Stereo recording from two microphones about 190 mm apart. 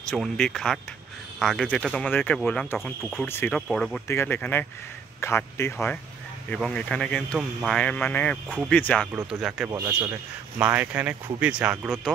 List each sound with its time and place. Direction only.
0.1 s speech: centre (ahead or behind)
3.3 s speech: 10° left (ahead or behind)
8.5 s speech: 5° right (ahead or behind)
8.7 s speech: 5° left (ahead or behind)
9.1 s speech: 5° right (ahead or behind)